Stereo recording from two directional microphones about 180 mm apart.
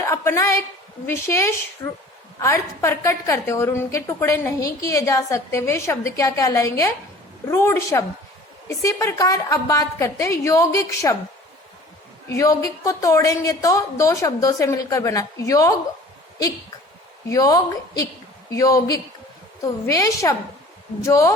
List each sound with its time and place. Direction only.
0.1 s a woman's voice: 15° left (ahead or behind)
12.3 s a woman's voice: 15° left (ahead or behind)
17.2 s a woman's voice: 20° left (ahead or behind)